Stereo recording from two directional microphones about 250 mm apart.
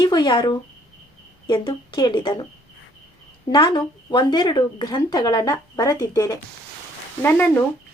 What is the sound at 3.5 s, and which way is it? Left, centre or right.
Speech, centre.